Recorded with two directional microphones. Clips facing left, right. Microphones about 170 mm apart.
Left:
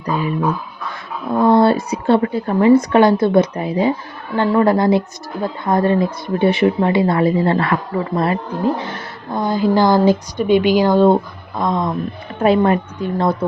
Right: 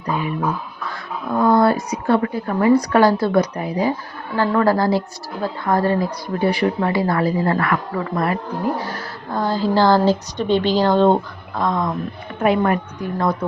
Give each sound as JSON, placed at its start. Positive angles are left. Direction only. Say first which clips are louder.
{"t": 0.1, "sound": "speech", "louder": "left 3 dB", "side_deg": 35}
{"t": 1.5, "sound": "a woman's voice", "louder": "left 3 dB", "side_deg": 30}